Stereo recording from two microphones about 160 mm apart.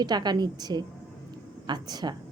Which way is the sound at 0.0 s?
25° right (ahead or behind).